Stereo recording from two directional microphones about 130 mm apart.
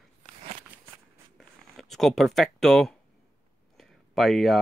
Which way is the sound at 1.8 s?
Centre (ahead or behind).